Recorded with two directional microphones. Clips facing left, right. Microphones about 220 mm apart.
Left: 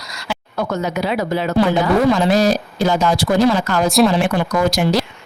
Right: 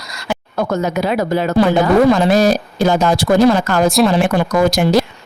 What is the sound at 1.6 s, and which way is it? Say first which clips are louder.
Speech: right 4 dB; 50° right (ahead or behind).